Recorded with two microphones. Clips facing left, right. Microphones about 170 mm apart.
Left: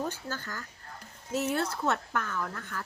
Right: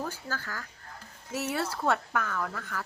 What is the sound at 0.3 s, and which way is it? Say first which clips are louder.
Speech: even; 90° right.